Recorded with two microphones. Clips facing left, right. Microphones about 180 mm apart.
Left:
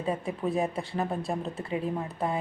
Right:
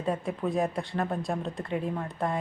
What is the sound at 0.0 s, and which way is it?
A woman's voice, centre (ahead or behind).